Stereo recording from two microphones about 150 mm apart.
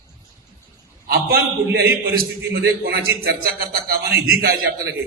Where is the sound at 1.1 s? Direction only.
90° right.